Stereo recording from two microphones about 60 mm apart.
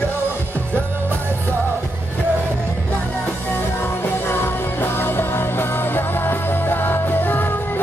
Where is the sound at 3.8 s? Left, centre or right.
Left.